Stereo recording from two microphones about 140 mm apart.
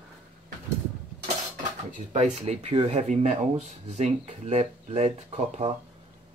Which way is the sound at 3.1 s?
60° right (ahead or behind).